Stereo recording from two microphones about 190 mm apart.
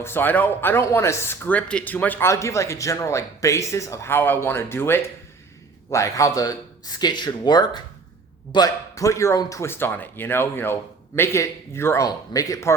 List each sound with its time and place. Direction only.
0.0 s speech: 10° left (ahead or behind)